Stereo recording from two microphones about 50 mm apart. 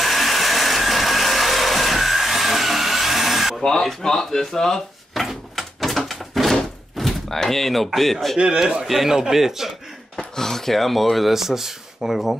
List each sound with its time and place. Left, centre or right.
0.0 s a sound: centre
3.6 s speech: centre
5.2 s a sound: centre
8.5 s a man's voice: centre
8.8 s speech: centre
10.3 s speech: centre